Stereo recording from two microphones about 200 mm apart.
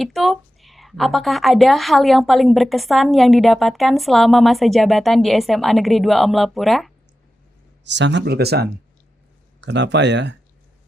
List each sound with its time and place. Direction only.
0.0 s a woman's voice: centre (ahead or behind)
7.9 s speech: 60° right (ahead or behind)